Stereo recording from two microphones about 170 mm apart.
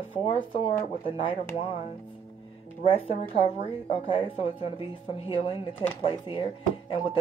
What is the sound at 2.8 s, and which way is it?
Speech, 35° left (ahead or behind).